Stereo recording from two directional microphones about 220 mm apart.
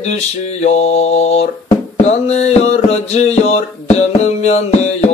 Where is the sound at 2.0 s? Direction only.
30° left (ahead or behind).